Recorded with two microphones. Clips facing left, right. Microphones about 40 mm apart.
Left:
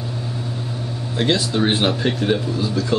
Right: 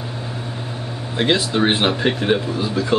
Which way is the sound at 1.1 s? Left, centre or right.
Centre.